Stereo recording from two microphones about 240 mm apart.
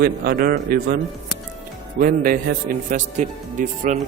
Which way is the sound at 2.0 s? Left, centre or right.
Right.